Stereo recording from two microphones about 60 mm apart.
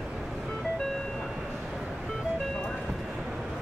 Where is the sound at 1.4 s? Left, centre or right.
Centre.